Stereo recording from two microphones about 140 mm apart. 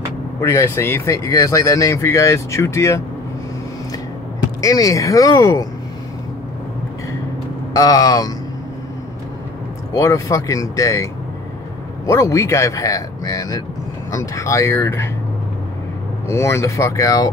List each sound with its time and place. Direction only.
0.4 s speech: 20° left (ahead or behind)
4.6 s speech: 25° left (ahead or behind)
7.7 s speech: 25° left (ahead or behind)
9.9 s speech: 25° left (ahead or behind)
12.1 s speech: 20° left (ahead or behind)
16.3 s speech: 20° left (ahead or behind)